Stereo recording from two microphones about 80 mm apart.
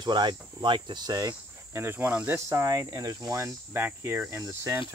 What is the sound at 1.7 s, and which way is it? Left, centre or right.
Speech, right.